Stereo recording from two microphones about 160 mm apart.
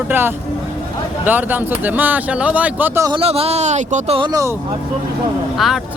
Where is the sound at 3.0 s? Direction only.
35° right (ahead or behind).